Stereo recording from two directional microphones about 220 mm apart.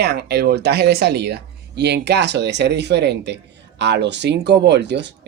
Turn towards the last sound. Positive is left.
turn(degrees=-50)  # may be behind; listen again after turning